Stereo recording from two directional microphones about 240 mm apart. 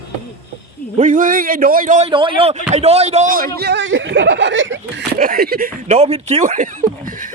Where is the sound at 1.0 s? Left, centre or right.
Right.